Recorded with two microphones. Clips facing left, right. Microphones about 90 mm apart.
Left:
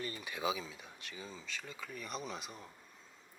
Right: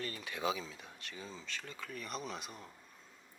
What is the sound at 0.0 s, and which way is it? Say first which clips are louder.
Speech: even; 5° left (ahead or behind).